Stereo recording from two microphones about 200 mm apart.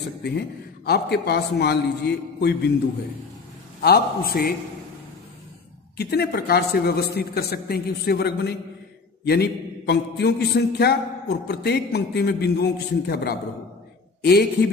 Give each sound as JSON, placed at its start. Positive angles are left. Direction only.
{"t": 0.8, "sound": "mantra", "side_deg": 55}
{"t": 3.8, "sound": "speech", "side_deg": 50}
{"t": 5.9, "sound": "speech", "side_deg": 55}
{"t": 9.2, "sound": "mantra", "side_deg": 55}
{"t": 14.2, "sound": "speech", "side_deg": 55}